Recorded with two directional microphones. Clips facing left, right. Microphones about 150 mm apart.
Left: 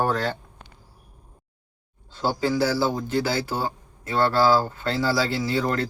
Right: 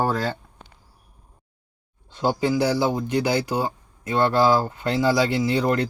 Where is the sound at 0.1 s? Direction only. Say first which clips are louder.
Even; 10° right (ahead or behind).